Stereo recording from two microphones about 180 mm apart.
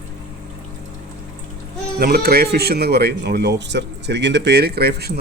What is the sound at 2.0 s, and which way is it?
Speech, 60° right (ahead or behind).